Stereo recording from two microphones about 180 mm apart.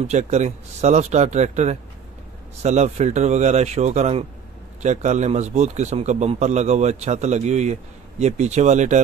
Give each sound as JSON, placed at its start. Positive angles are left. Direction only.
{"t": 0.0, "sound": "a man's voice", "side_deg": -40}